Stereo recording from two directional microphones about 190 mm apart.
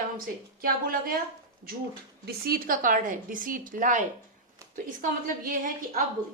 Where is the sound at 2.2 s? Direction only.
50° right (ahead or behind).